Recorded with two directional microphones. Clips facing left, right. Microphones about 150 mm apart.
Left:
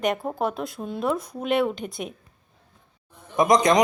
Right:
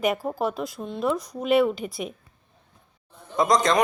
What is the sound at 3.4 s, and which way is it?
Speech, 15° left (ahead or behind).